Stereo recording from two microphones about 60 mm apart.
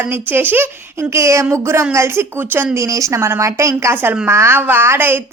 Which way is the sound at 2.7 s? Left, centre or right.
Right.